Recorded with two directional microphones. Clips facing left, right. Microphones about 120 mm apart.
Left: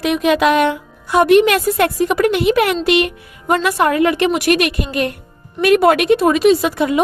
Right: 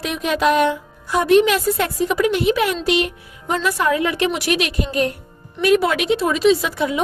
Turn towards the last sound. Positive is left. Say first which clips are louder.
# left 5 dB
turn(degrees=55)  # may be behind; listen again after turning